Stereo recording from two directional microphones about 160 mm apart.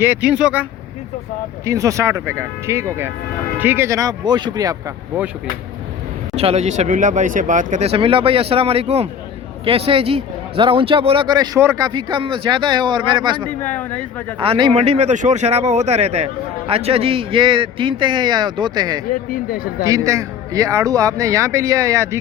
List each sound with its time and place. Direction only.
0.0 s speech: 10° right (ahead or behind)
1.6 s a man's voice: 20° right (ahead or behind)
6.3 s a man's voice: 40° right (ahead or behind)
13.6 s speech: 10° left (ahead or behind)
14.3 s speech: 35° right (ahead or behind)
19.3 s speech: 60° left (ahead or behind)
19.8 s a man's voice: 20° right (ahead or behind)